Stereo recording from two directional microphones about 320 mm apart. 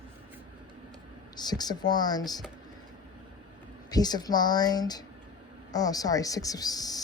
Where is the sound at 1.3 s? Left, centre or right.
Centre.